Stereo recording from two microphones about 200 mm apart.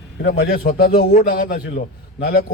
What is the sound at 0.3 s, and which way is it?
A man's voice, 55° left (ahead or behind).